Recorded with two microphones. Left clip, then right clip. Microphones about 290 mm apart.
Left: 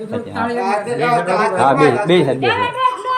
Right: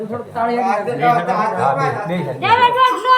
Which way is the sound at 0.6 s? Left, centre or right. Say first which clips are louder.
Even; left.